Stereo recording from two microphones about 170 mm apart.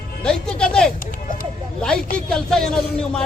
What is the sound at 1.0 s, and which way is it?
Run, 55° left (ahead or behind).